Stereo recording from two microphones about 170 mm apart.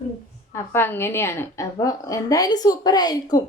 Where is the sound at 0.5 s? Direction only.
15° left (ahead or behind).